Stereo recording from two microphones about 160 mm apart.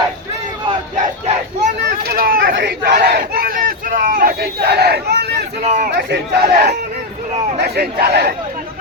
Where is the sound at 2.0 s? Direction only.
70° right (ahead or behind); by 5.4 s 90° right.